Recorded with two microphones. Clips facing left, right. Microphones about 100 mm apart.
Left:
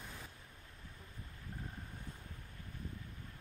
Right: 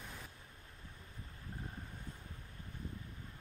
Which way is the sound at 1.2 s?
30° right (ahead or behind).